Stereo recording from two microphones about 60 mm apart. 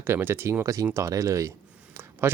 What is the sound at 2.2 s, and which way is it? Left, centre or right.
Speech, right.